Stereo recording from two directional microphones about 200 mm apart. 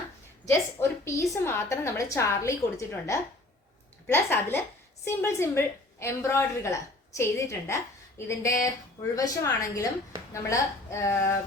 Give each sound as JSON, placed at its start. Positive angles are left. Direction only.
{"t": 0.4, "sound": "a woman's voice", "side_deg": 15}